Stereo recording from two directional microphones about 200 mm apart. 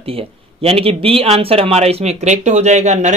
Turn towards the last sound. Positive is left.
turn(degrees=-35)  # may be behind; listen again after turning